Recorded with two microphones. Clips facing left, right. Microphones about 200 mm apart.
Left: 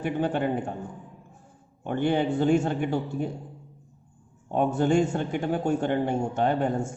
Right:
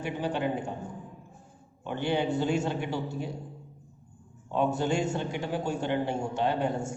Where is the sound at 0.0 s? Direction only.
55° left (ahead or behind).